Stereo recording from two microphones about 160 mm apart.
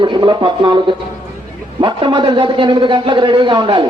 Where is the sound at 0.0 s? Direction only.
30° right (ahead or behind).